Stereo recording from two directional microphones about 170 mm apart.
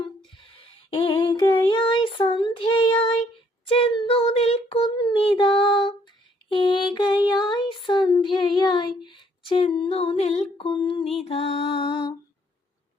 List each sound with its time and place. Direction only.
0.9 s child singing: 30° left (ahead or behind)
6.5 s mantra: 30° left (ahead or behind)
7.3 s child singing: 25° left (ahead or behind)
10.6 s mantra: 30° left (ahead or behind)